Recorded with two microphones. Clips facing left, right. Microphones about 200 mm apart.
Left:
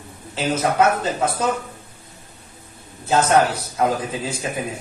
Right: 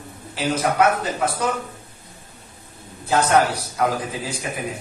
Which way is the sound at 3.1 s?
25° left (ahead or behind).